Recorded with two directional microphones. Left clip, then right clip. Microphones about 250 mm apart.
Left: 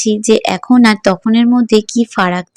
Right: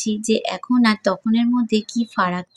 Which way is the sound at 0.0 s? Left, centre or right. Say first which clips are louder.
Left 10 dB; left.